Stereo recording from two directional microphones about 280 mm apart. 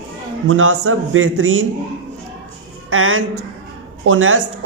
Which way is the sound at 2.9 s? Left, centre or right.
Right.